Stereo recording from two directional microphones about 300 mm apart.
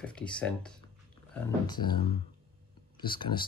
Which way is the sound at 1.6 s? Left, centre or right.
Centre.